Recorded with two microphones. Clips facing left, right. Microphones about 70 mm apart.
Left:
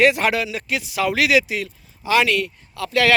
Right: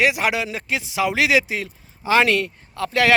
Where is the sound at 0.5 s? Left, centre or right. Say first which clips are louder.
Even; right.